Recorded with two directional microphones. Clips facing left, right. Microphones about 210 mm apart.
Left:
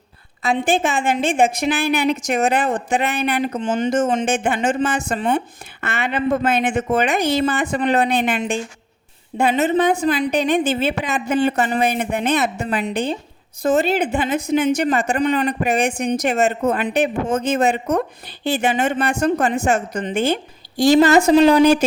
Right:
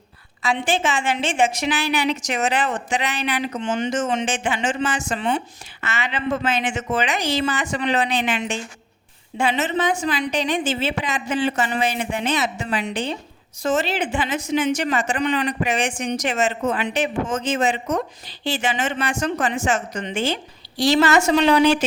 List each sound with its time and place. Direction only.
0.8 s a woman's voice: 55° left (ahead or behind)
3.5 s speech: 35° left (ahead or behind)
3.8 s a woman's voice: 55° left (ahead or behind)